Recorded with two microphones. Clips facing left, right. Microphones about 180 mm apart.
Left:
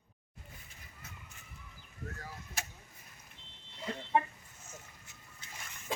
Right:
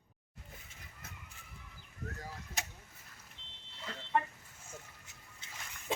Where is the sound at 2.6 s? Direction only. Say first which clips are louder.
Even; 20° right (ahead or behind).